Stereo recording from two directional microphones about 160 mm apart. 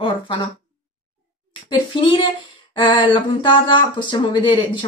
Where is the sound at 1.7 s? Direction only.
30° left (ahead or behind).